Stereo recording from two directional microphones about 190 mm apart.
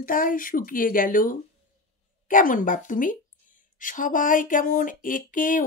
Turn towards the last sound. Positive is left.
turn(degrees=45)  # may be behind; listen again after turning